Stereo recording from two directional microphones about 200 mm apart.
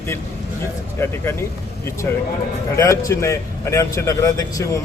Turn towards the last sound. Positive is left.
turn(degrees=15)  # may be behind; listen again after turning